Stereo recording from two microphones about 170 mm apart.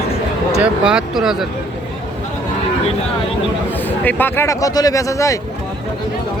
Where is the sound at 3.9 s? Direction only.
10° left (ahead or behind).